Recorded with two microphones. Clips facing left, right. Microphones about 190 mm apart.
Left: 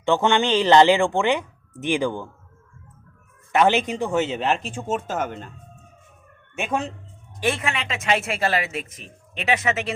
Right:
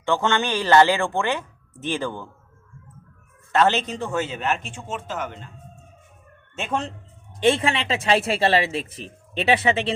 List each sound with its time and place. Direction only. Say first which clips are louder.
0.0 s speech: left 3 dB; 15° left (ahead or behind)
3.5 s speech: left 1 dB; 15° left (ahead or behind); by 5.5 s 45° left (ahead or behind)
6.6 s speech: left 1 dB; 10° left (ahead or behind)
7.3 s speech: right 5 dB; 25° right (ahead or behind)